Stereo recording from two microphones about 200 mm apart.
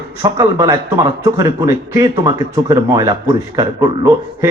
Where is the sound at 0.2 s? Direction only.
15° right (ahead or behind).